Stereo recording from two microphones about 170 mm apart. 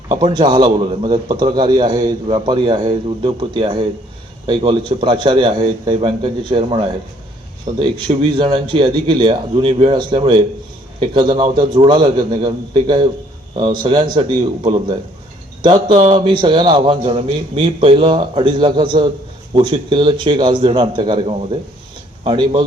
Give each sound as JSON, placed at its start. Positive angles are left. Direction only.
{"t": 0.3, "sound": "a man's voice", "side_deg": -25}